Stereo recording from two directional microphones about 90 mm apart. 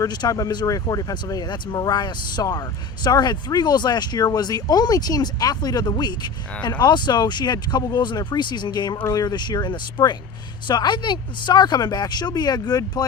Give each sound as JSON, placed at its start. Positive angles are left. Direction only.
{"t": 0.0, "sound": "speech", "side_deg": 45}